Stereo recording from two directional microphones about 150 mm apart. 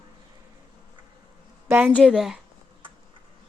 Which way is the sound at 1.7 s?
10° right (ahead or behind).